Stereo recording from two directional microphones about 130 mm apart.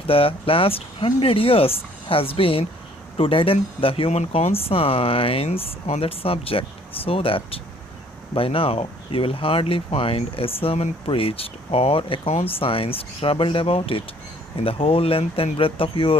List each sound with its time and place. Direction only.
0.1 s speech: 45° left (ahead or behind)